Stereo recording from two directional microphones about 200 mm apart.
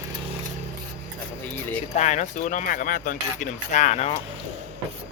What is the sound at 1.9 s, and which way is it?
Speech, 35° left (ahead or behind).